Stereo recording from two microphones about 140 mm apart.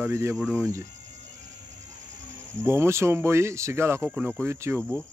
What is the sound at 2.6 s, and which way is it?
Speech, 20° right (ahead or behind).